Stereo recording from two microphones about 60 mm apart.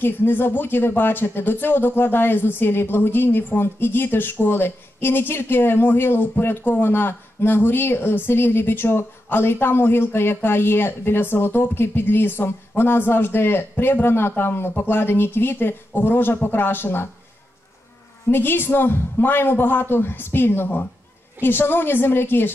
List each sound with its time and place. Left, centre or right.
0.0 s speech: left
18.3 s speech: left